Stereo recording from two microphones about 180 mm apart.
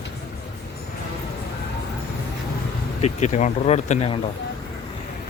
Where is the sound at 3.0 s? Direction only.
40° left (ahead or behind).